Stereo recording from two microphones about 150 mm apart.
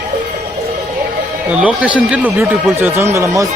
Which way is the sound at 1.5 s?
10° right (ahead or behind).